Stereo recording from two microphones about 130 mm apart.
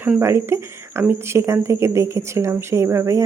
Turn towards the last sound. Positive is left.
turn(degrees=-20)  # may be behind; listen again after turning